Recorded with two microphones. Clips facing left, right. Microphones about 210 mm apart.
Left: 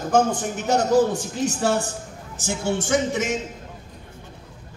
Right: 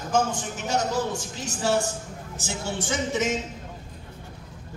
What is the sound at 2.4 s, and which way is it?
Music, 50° left (ahead or behind).